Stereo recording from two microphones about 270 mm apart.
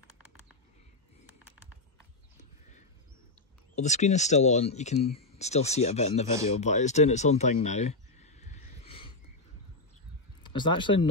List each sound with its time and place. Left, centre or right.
3.7 s speech: left
6.6 s a sound: left
10.4 s speech: centre